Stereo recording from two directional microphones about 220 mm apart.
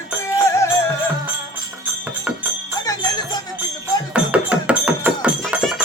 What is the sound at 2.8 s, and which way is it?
Music, 15° left (ahead or behind).